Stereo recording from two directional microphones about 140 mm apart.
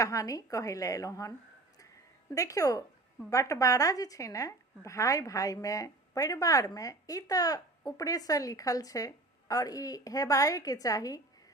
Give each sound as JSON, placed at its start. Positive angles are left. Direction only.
{"t": 0.0, "sound": "a woman's voice", "side_deg": 25}
{"t": 2.3, "sound": "a woman's voice", "side_deg": 25}